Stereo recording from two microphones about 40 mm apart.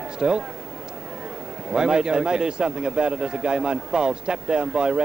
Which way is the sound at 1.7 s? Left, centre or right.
Right.